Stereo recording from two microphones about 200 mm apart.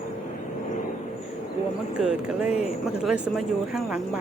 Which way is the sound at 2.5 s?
30° left (ahead or behind).